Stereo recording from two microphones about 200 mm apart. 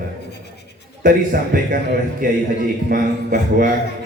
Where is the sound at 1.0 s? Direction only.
45° right (ahead or behind).